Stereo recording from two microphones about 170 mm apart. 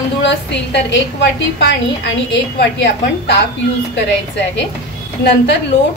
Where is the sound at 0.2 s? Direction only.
90° left.